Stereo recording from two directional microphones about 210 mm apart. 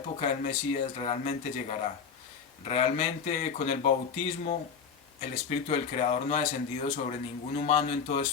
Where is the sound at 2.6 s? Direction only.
30° left (ahead or behind).